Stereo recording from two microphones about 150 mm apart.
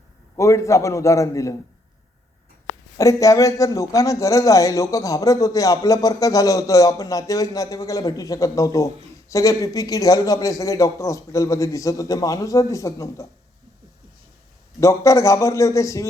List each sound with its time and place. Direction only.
0.3 s a man's voice: 20° left (ahead or behind)
3.0 s a man's voice: 20° left (ahead or behind)
14.8 s a man's voice: 20° left (ahead or behind)